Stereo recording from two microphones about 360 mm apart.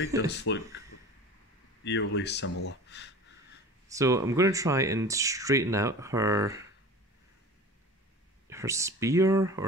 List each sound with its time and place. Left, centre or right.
0.3 s speech: left
1.9 s speech: left
3.9 s speech: centre
8.5 s speech: centre